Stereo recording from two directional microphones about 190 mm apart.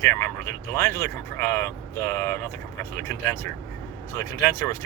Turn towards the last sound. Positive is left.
turn(degrees=15)  # may be behind; listen again after turning